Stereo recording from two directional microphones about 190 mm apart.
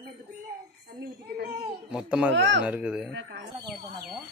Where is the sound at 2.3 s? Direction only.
65° right (ahead or behind).